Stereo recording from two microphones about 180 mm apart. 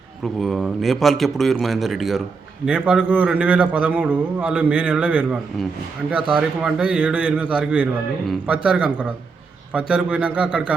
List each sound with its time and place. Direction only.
0.2 s a man's voice: centre (ahead or behind)